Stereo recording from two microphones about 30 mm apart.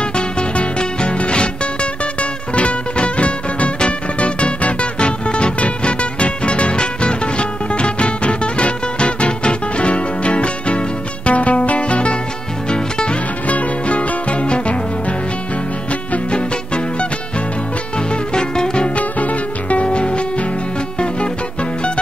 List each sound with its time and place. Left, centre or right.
0.1 s music: left
4.9 s music: left
13.5 s music: left
16.3 s music: left
18.3 s music: left
18.9 s music: left
19.8 s music: left